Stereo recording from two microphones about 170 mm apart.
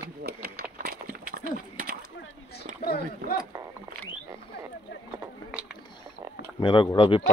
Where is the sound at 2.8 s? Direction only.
60° left (ahead or behind).